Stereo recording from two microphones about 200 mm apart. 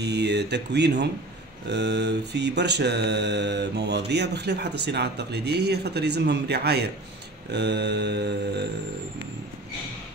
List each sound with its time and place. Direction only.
0.0 s mantra: 60° right (ahead or behind)